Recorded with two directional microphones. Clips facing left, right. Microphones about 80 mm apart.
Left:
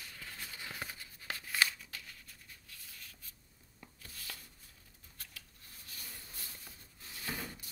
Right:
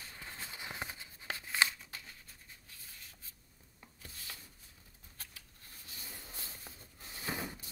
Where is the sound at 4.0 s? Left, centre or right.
Right.